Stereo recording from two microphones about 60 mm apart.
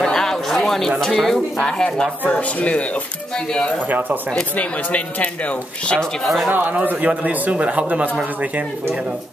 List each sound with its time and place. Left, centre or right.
0.0 s a sound: centre
1.0 s speech: centre; by 5.9 s left
6.2 s speech: centre
6.5 s speech: right